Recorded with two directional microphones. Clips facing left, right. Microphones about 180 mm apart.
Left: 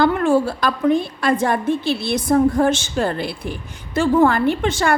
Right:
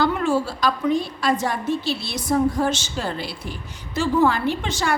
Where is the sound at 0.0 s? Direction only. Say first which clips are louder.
Left 5 dB; 55° left (ahead or behind).